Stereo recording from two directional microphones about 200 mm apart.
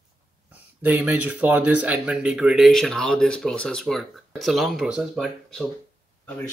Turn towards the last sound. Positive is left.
turn(degrees=0)  # may be behind; listen again after turning